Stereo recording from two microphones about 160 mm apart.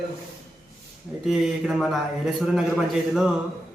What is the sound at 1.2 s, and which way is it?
A man's voice, centre (ahead or behind).